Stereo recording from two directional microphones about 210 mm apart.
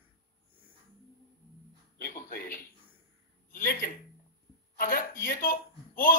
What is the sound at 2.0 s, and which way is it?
Music, 40° left (ahead or behind).